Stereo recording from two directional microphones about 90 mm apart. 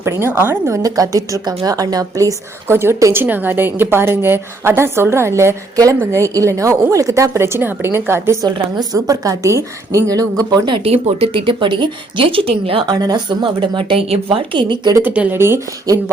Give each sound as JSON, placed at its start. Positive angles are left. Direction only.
{"t": 0.0, "sound": "a woman's voice", "side_deg": -30}
{"t": 0.7, "sound": "a woman's voice", "side_deg": -40}
{"t": 5.7, "sound": "a woman's voice", "side_deg": -40}
{"t": 6.0, "sound": "a woman's voice", "side_deg": -30}
{"t": 8.5, "sound": "a woman's voice", "side_deg": -50}
{"t": 10.7, "sound": "speech", "side_deg": -80}
{"t": 12.9, "sound": "speech", "side_deg": -50}
{"t": 15.0, "sound": "speech", "side_deg": -15}
{"t": 15.4, "sound": "a woman's voice", "side_deg": -25}